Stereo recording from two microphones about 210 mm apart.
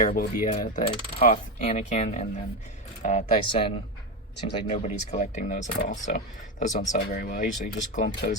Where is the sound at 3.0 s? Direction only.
30° left (ahead or behind).